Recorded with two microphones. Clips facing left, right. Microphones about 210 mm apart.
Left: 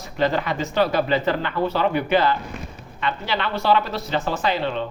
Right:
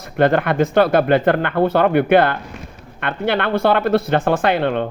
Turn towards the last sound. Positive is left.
turn(degrees=-55)  # may be behind; listen again after turning